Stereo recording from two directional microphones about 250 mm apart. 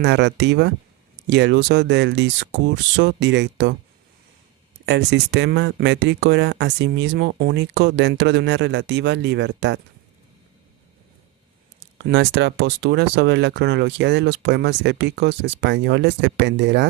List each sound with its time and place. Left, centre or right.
0.0 s speech: right
4.9 s speech: right
11.9 s speech: right